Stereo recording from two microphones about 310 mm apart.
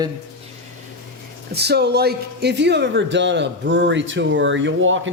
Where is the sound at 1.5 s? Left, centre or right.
Right.